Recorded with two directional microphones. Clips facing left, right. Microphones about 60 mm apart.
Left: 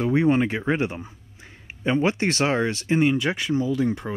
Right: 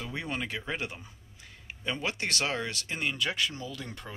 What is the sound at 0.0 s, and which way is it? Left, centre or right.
Speech, left.